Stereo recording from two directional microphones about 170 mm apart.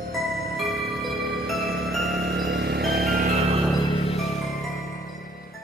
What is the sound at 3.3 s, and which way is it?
Music, 35° right (ahead or behind).